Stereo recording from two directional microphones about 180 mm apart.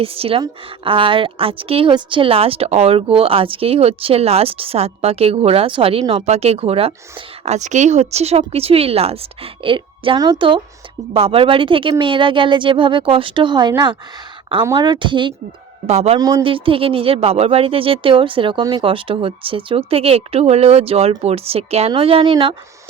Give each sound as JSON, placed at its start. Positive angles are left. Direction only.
{"t": 0.0, "sound": "speech", "side_deg": -30}
{"t": 16.1, "sound": "speech", "side_deg": -20}